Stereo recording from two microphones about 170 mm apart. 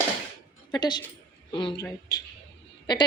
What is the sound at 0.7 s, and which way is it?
A woman's voice, 25° left (ahead or behind).